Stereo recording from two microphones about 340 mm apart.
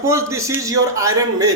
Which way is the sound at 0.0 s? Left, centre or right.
Centre.